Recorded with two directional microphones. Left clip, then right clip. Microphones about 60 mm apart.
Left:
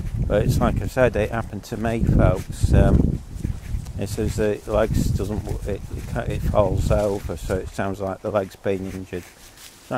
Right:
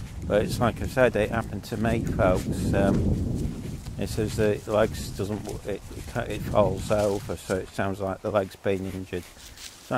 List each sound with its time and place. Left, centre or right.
0.3 s speech: centre
2.7 s speech: centre
4.0 s speech: centre
7.0 s speech: right
7.5 s speech: centre